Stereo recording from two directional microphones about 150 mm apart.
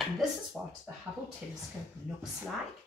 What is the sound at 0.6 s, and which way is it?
Speech, 5° right (ahead or behind).